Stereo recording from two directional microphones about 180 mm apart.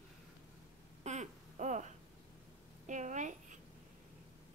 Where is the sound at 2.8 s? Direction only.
45° right (ahead or behind).